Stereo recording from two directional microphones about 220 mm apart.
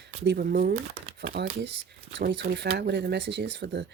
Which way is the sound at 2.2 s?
50° right (ahead or behind).